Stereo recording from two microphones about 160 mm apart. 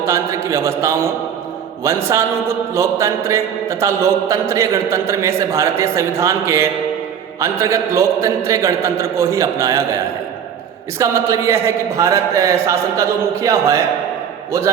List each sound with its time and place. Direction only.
0.0 s a man's voice: 15° right (ahead or behind)
1.8 s mantra: 15° right (ahead or behind)